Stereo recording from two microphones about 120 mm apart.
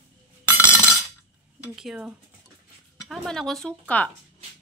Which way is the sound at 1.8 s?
5° right (ahead or behind).